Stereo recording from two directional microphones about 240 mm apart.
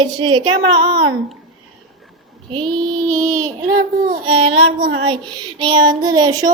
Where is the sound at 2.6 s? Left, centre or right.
Right.